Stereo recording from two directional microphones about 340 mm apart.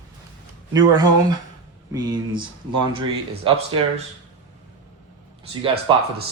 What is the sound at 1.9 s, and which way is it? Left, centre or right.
Speech, centre.